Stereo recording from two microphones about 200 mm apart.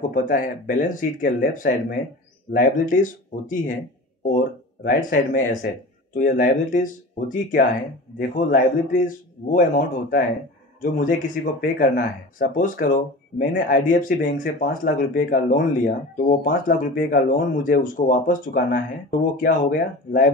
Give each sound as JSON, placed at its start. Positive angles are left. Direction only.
{"t": 0.1, "sound": "speech", "side_deg": 45}